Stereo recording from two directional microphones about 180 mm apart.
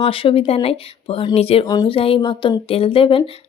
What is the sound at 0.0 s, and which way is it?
Speech, 30° left (ahead or behind).